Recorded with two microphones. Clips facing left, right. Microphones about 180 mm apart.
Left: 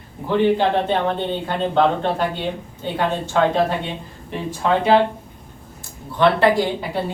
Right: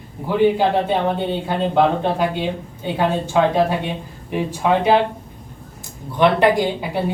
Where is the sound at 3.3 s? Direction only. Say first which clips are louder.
Right 1 dB; 10° right (ahead or behind).